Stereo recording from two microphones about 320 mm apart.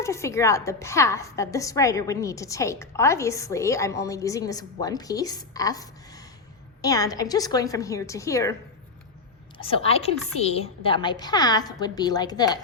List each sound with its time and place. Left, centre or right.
0.0 s a woman's voice: centre
9.6 s a woman's voice: centre